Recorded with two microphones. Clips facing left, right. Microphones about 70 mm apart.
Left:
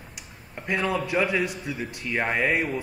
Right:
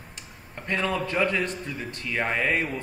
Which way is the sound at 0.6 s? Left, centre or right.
Centre.